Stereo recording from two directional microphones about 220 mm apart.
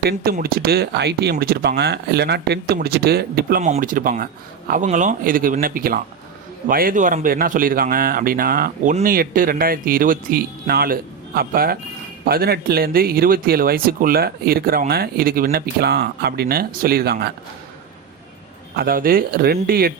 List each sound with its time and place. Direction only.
0.0 s a man's voice: 45° right (ahead or behind)
18.8 s speech: 40° right (ahead or behind)